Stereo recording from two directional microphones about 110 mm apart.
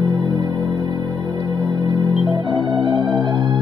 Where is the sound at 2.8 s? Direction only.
45° right (ahead or behind).